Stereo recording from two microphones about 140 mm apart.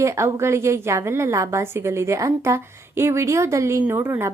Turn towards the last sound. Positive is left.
turn(degrees=-20)  # may be behind; listen again after turning